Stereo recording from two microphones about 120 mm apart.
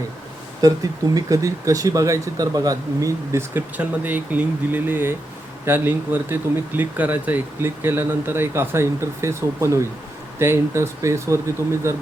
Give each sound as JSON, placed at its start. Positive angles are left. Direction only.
{"t": 0.6, "sound": "speech", "side_deg": -30}